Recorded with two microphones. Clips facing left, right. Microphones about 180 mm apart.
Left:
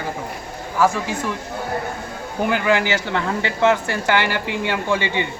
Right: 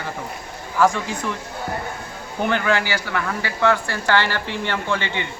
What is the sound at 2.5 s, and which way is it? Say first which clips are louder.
A woman's voice: left 3 dB; 15° left (ahead or behind).